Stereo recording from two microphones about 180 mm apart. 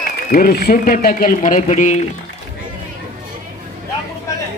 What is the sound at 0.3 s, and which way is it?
Speech, 55° left (ahead or behind).